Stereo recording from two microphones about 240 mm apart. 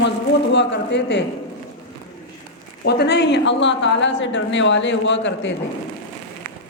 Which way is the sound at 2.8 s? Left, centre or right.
Left.